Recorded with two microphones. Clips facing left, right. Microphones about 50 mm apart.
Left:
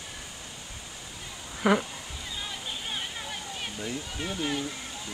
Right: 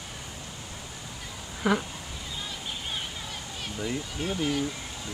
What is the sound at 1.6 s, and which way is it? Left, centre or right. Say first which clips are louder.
Moo: left 2 dB; centre.